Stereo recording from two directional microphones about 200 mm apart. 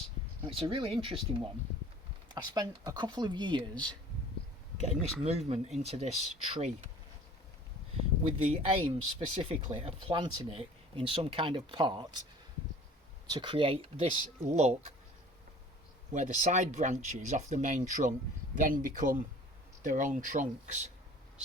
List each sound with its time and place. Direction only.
0.4 s speech: 25° right (ahead or behind)
4.8 s speech: 30° right (ahead or behind)
8.2 s speech: 30° right (ahead or behind)
13.3 s speech: 25° right (ahead or behind)
16.1 s speech: 35° right (ahead or behind)